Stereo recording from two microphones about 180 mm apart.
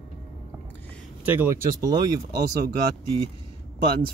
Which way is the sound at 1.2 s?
10° right (ahead or behind).